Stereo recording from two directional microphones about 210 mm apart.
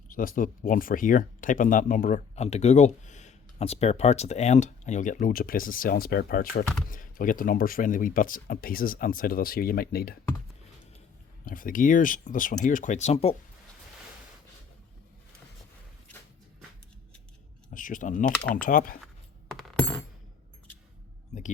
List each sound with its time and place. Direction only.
0.1 s speech: 40° left (ahead or behind)
11.4 s speech: 40° left (ahead or behind)
17.7 s speech: 40° left (ahead or behind)
18.3 s speech: 5° left (ahead or behind)
18.5 s speech: 40° left (ahead or behind)
19.5 s music: centre (ahead or behind)
21.3 s speech: 35° left (ahead or behind)